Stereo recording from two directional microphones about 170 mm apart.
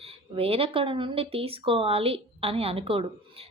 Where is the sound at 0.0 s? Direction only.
35° right (ahead or behind).